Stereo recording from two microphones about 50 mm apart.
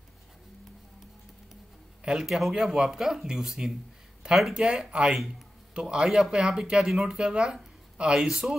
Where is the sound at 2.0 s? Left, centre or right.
Centre.